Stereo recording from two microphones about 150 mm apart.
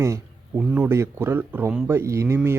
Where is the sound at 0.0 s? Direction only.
20° right (ahead or behind).